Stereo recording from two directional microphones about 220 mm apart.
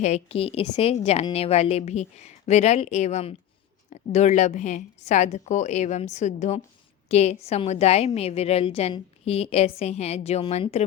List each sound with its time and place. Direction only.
0.0 s a woman's voice: 30° left (ahead or behind)